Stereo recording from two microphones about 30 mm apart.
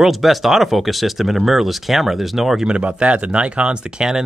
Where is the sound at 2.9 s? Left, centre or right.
Right.